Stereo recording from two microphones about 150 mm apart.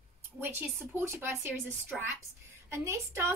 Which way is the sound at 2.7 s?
20° right (ahead or behind).